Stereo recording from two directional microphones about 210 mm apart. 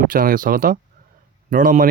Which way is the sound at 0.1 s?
40° right (ahead or behind).